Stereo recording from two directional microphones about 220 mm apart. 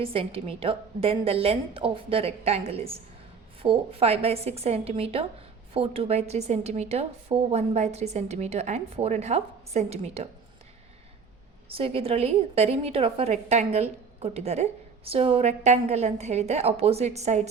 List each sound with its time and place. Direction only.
0.0 s a woman's voice: 25° right (ahead or behind)
11.7 s a woman's voice: 25° right (ahead or behind)